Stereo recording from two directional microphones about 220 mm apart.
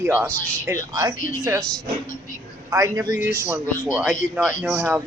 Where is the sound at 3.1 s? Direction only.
40° left (ahead or behind).